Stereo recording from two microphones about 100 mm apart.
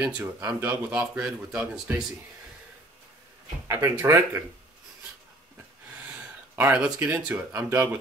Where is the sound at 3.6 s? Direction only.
25° right (ahead or behind).